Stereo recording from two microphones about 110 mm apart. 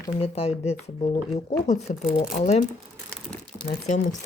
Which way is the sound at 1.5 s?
90° left.